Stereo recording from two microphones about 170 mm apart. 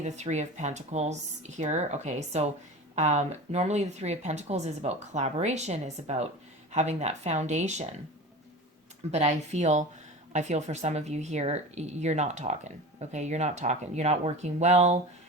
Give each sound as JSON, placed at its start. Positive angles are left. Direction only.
{"t": 0.0, "sound": "speech", "side_deg": -45}
{"t": 9.1, "sound": "speech", "side_deg": -40}